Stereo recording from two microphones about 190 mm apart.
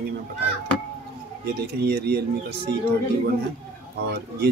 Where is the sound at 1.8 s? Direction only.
55° right (ahead or behind).